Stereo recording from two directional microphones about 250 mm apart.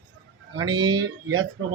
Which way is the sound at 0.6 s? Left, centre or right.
Centre.